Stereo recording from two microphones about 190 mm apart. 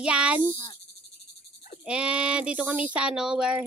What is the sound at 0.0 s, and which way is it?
Speech, 5° right (ahead or behind).